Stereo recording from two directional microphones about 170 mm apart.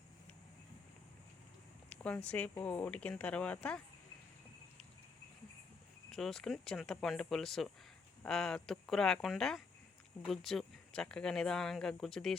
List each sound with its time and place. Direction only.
1.9 s speech: 10° left (ahead or behind)
6.1 s speech: centre (ahead or behind)